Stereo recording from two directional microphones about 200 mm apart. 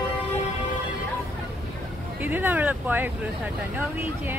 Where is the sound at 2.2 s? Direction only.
10° right (ahead or behind).